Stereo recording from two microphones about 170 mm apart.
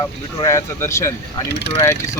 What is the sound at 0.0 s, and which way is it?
Speech, 15° left (ahead or behind).